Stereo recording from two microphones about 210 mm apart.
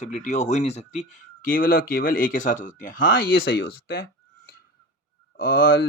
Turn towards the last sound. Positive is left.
turn(degrees=45)  # may be behind; listen again after turning